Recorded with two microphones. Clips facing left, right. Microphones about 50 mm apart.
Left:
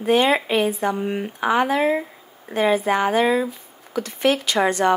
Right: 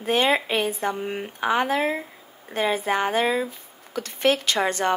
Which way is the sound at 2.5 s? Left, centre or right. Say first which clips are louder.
Left 4 dB; left.